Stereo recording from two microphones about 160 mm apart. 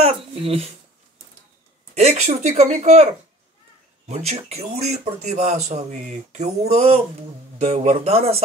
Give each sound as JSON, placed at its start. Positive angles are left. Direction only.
{"t": 0.0, "sound": "speech", "side_deg": -35}
{"t": 2.0, "sound": "speech", "side_deg": -45}
{"t": 4.1, "sound": "a man's voice", "side_deg": -45}